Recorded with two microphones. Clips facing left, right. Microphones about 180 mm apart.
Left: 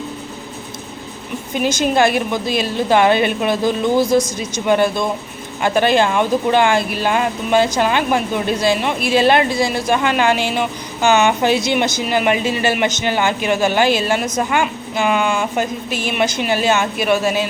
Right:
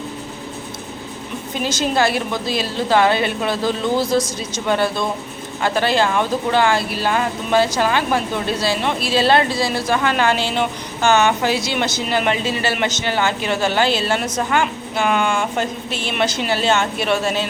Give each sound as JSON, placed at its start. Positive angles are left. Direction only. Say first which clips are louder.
{"t": 1.6, "sound": "speech", "louder": "left 3 dB", "side_deg": 15}